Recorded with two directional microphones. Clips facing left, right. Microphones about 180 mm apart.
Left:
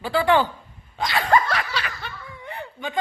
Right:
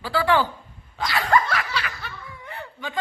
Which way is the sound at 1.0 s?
25° left (ahead or behind).